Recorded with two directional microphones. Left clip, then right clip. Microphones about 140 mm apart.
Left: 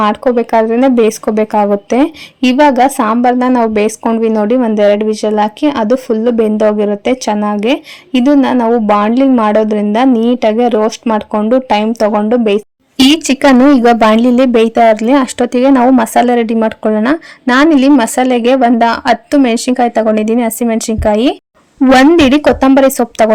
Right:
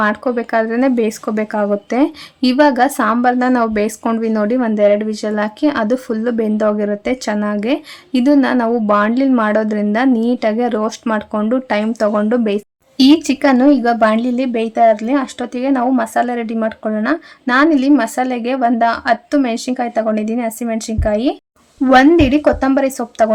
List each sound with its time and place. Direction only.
0.0 s speech: 25° left (ahead or behind)
13.0 s a woman's voice: 45° left (ahead or behind)